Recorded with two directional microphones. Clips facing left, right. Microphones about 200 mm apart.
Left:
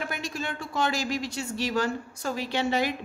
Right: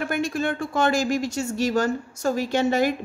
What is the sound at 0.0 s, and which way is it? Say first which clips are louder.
A woman's voice: right 8 dB; 55° right (ahead or behind).